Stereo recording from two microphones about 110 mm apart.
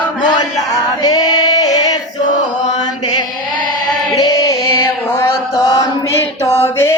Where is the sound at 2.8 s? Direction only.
40° left (ahead or behind).